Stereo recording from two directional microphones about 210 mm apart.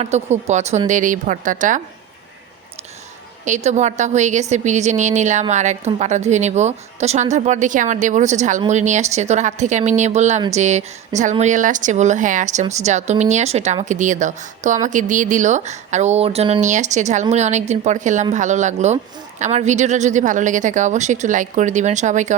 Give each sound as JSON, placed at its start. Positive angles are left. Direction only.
{"t": 0.0, "sound": "a woman's voice", "side_deg": -30}
{"t": 3.4, "sound": "a woman's voice", "side_deg": -35}